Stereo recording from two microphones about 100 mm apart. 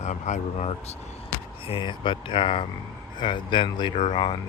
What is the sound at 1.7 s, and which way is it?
Speech, 55° left (ahead or behind).